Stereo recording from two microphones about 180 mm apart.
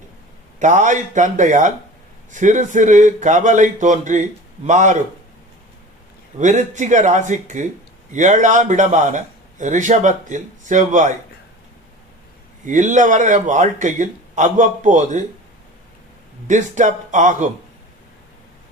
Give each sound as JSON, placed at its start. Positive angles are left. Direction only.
{"t": 0.6, "sound": "a man's voice", "side_deg": -45}
{"t": 6.4, "sound": "a man's voice", "side_deg": -40}
{"t": 12.6, "sound": "a man's voice", "side_deg": -45}
{"t": 16.5, "sound": "a man's voice", "side_deg": -45}